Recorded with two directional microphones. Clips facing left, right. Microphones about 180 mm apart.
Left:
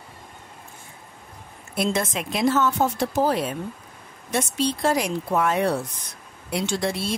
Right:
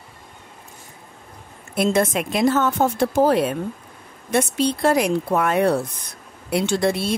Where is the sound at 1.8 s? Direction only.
55° right (ahead or behind).